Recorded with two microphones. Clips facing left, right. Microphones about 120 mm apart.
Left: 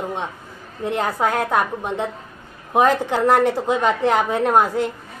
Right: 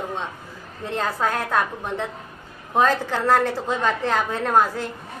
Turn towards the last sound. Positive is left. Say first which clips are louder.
# left 3 dB
turn(degrees=15)  # may be behind; listen again after turning